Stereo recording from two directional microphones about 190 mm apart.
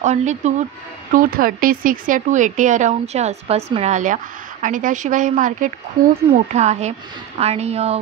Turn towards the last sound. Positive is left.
turn(degrees=-35)  # may be behind; listen again after turning